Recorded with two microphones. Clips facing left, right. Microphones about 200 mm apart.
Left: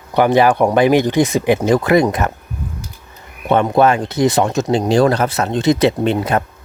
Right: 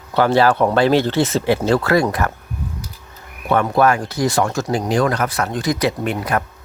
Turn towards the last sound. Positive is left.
turn(degrees=25)  # may be behind; listen again after turning